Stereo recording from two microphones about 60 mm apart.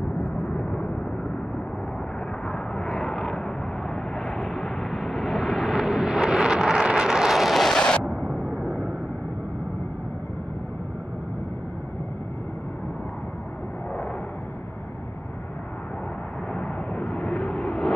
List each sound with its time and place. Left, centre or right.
0.2 s vehicle: centre
2.4 s vehicle: centre
2.9 s vehicle: centre
8.3 s vehicle: centre
16.5 s vehicle: centre